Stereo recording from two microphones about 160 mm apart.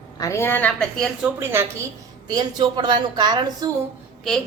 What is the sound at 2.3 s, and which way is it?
A woman's voice, 25° right (ahead or behind).